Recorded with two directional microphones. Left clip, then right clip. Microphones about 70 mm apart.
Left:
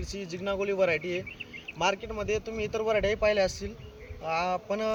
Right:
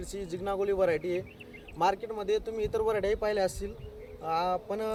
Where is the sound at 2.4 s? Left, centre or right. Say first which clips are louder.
Even; right.